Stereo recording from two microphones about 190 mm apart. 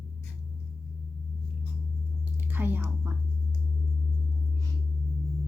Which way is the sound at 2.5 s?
10° right (ahead or behind).